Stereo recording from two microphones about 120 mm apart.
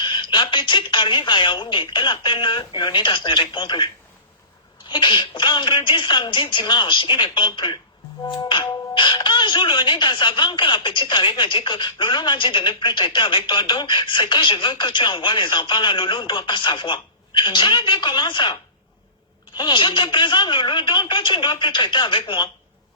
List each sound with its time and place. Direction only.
0.0 s speech: 40° left (ahead or behind)
4.9 s speech: 40° left (ahead or behind)